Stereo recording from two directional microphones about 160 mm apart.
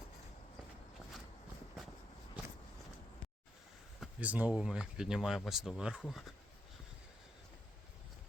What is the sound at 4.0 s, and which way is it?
Speech, 10° right (ahead or behind).